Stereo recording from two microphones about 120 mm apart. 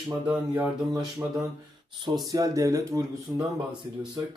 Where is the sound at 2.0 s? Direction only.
35° right (ahead or behind).